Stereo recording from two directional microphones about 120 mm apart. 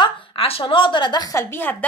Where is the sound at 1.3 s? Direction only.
15° left (ahead or behind).